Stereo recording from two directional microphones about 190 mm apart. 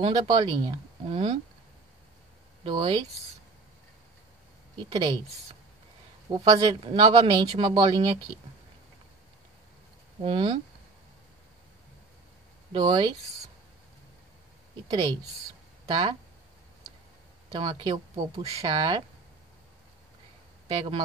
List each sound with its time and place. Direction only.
0.0 s speech: 20° right (ahead or behind)
2.6 s speech: 25° right (ahead or behind)
6.3 s speech: 20° right (ahead or behind)
10.2 s speech: 25° right (ahead or behind)
12.7 s speech: 25° right (ahead or behind)
15.9 s speech: 25° right (ahead or behind)
17.5 s speech: 25° right (ahead or behind)
20.6 s speech: 30° right (ahead or behind)